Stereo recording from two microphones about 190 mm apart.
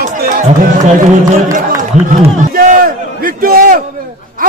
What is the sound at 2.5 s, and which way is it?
Speech, 50° right (ahead or behind).